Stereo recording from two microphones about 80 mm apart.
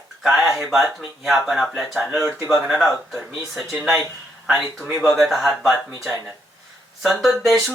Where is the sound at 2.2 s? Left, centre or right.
Right.